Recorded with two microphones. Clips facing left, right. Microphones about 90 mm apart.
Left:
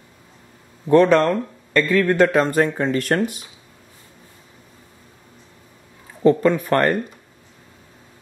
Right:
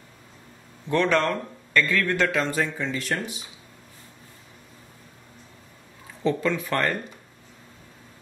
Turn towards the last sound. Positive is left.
turn(degrees=50)  # may be behind; listen again after turning